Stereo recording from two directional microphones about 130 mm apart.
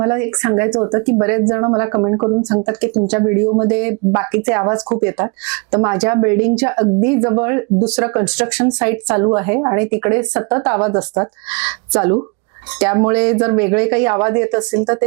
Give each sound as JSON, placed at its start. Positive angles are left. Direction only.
{"t": 0.0, "sound": "speech", "side_deg": -20}